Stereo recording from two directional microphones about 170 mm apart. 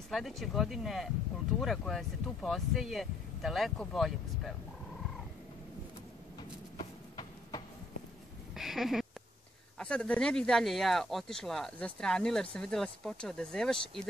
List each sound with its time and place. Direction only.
0.1 s speech: centre (ahead or behind)
8.5 s speech: centre (ahead or behind)